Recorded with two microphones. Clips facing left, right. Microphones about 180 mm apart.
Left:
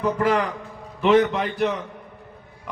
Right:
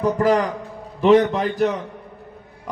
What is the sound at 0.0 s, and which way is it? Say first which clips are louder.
A man's voice: right 3 dB; 40° right (ahead or behind).